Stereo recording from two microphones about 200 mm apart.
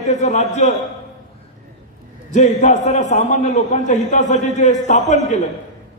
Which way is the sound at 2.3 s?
35° left (ahead or behind).